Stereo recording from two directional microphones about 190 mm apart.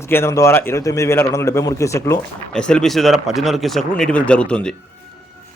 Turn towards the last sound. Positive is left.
turn(degrees=5)  # may be behind; listen again after turning